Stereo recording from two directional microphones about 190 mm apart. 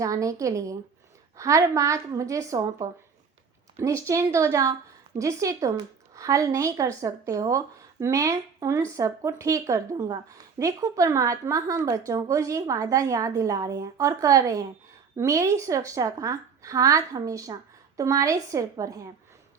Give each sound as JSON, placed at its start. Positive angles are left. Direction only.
{"t": 0.0, "sound": "a woman's voice", "side_deg": -15}